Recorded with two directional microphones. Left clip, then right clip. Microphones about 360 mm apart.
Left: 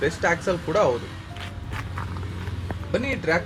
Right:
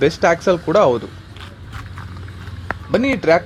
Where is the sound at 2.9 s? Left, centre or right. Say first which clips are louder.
Right 9 dB; right.